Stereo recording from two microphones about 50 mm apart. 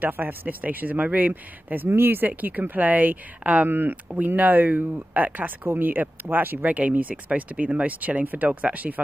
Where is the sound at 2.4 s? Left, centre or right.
Right.